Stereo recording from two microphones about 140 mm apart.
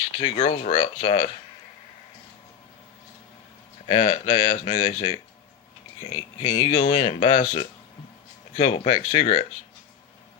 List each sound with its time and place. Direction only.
0.4 s speech: 55° left (ahead or behind)
3.8 s speech: 50° left (ahead or behind)
6.0 s speech: 40° left (ahead or behind)
6.7 s speech: 55° left (ahead or behind)